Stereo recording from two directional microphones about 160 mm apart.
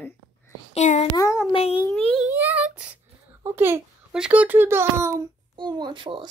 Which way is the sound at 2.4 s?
10° right (ahead or behind).